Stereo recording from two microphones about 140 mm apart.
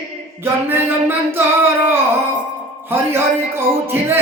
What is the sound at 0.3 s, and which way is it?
Music, 15° right (ahead or behind).